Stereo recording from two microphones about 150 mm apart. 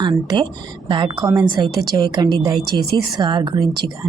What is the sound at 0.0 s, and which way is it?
A woman's voice, 30° right (ahead or behind).